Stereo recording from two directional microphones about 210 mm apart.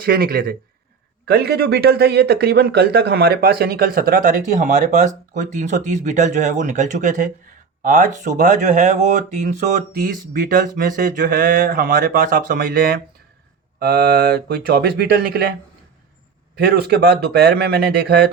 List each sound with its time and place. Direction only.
0.0 s speech: 45° right (ahead or behind)
16.6 s speech: 50° right (ahead or behind)